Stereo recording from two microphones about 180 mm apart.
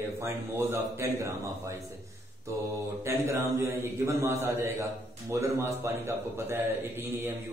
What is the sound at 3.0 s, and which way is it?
A man's voice, 15° right (ahead or behind).